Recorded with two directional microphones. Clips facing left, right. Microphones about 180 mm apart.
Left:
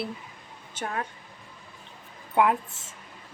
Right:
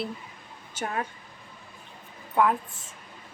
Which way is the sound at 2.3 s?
20° left (ahead or behind).